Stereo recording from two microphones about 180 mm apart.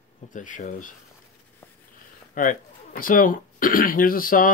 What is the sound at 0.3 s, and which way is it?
Speech, 45° left (ahead or behind).